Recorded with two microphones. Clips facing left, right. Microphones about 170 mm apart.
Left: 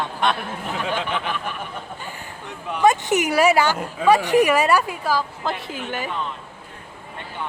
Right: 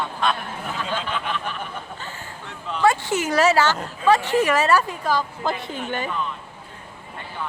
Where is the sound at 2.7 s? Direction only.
20° left (ahead or behind).